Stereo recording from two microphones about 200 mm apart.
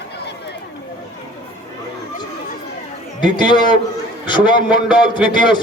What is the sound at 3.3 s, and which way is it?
A man's voice, 20° left (ahead or behind).